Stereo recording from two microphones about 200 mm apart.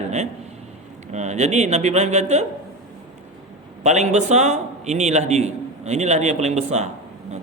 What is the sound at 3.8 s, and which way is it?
A man's voice, 35° right (ahead or behind).